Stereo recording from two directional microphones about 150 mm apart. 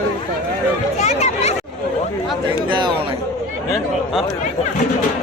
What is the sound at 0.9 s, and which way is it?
Speech, 50° left (ahead or behind).